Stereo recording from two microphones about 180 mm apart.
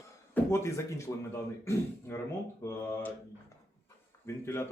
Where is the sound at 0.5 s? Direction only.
15° left (ahead or behind).